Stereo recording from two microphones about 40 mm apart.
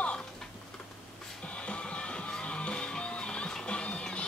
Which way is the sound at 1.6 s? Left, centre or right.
Left.